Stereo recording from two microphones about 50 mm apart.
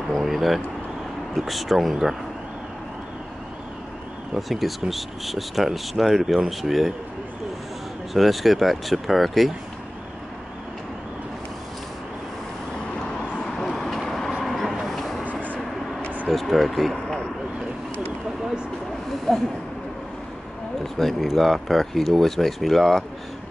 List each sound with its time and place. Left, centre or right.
0.1 s a sound: centre
1.3 s speech: centre
4.4 s speech: centre
8.1 s speech: centre
13.2 s a sound: centre
13.7 s vehicle: centre
15.4 s vehicle: left
16.3 s speech: centre
19.3 s a sound: centre
20.8 s speech: centre